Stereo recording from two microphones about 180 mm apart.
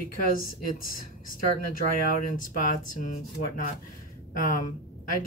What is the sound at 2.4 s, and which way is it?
Speech, 45° left (ahead or behind).